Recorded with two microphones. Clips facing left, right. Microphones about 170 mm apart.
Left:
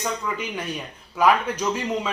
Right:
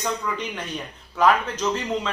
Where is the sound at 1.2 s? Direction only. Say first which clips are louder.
Even; 10° left (ahead or behind).